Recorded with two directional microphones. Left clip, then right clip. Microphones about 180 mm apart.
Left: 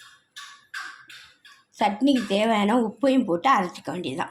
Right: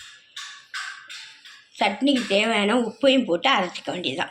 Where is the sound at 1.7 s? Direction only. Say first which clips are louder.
Even; 60° left (ahead or behind).